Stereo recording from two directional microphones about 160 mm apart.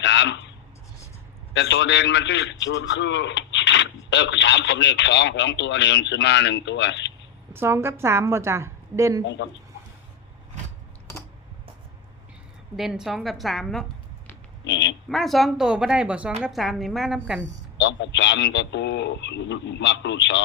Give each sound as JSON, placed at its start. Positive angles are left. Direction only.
{"t": 0.0, "sound": "a sound", "side_deg": 90}
{"t": 1.5, "sound": "a man's voice", "side_deg": 90}
{"t": 7.5, "sound": "a woman's voice", "side_deg": -15}
{"t": 9.2, "sound": "a man's voice", "side_deg": 90}
{"t": 12.7, "sound": "speech", "side_deg": 0}
{"t": 14.7, "sound": "a man's voice", "side_deg": 90}
{"t": 15.1, "sound": "speech", "side_deg": 0}
{"t": 17.7, "sound": "a man's voice", "side_deg": 90}